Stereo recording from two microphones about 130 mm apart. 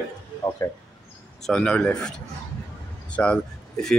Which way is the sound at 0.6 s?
20° left (ahead or behind).